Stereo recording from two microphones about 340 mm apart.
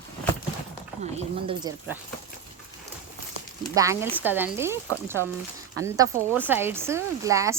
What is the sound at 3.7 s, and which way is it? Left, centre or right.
Speech, centre.